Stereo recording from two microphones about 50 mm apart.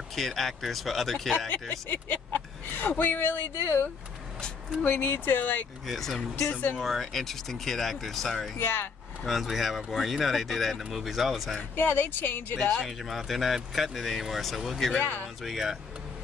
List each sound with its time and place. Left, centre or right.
0.1 s speech: centre
1.5 s speech: left
4.8 s speech: left
5.9 s speech: centre
6.5 s speech: left
6.8 s speech: centre
8.5 s speech: left
9.2 s speech: centre
11.7 s speech: left
12.5 s speech: centre
12.8 s speech: centre
15.0 s speech: left
15.4 s speech: centre